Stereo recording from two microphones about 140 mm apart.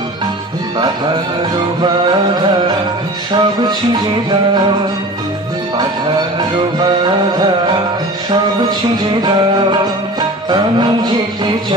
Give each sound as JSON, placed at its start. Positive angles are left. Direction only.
{"t": 0.7, "sound": "music", "side_deg": -30}
{"t": 3.3, "sound": "music", "side_deg": -30}
{"t": 7.3, "sound": "music", "side_deg": -30}
{"t": 10.5, "sound": "music", "side_deg": -30}